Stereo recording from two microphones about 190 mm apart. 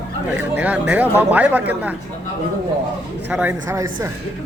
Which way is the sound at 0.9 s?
10° right (ahead or behind).